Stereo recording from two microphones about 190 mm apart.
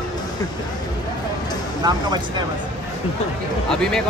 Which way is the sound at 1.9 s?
20° right (ahead or behind).